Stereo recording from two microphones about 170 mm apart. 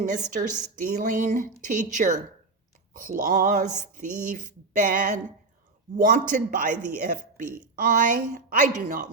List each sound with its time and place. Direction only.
0.0 s speech: 45° right (ahead or behind)